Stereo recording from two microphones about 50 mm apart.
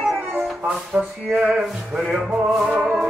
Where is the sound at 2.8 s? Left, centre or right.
Right.